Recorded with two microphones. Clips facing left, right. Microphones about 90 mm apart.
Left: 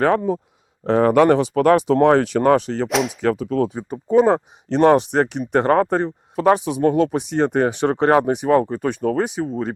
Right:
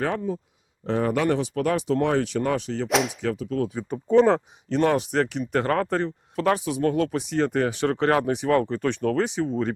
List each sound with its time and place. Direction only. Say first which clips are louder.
0.0 s speech: left 9 dB; 60° left (ahead or behind)
0.9 s speech: left 9 dB; 75° left (ahead or behind)
2.0 s speech: left 8 dB; 50° left (ahead or behind)
2.9 s speech: left 1 dB; centre (ahead or behind)
3.2 s speech: left 7 dB; 65° left (ahead or behind)
3.8 s speech: left 2 dB; 10° left (ahead or behind)
4.4 s speech: left 6 dB; 30° left (ahead or behind)
5.1 s speech: left 5 dB; 20° left (ahead or behind)